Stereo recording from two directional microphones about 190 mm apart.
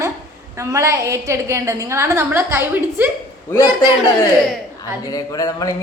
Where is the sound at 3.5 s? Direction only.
20° left (ahead or behind).